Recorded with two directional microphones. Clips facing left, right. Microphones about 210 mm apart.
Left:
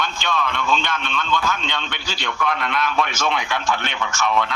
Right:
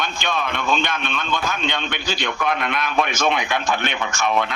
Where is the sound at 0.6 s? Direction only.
55° right (ahead or behind).